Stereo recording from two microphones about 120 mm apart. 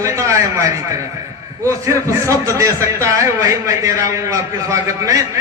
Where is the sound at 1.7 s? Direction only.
25° right (ahead or behind).